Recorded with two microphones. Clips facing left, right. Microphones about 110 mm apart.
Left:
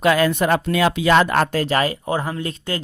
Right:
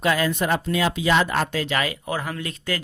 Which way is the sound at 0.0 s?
65° left (ahead or behind).